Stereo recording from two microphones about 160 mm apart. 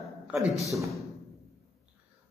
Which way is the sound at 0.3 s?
5° right (ahead or behind).